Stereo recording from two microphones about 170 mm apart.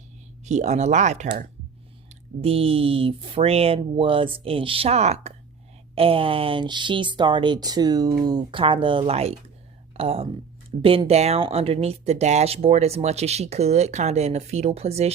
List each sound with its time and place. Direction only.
0.4 s speech: 40° right (ahead or behind)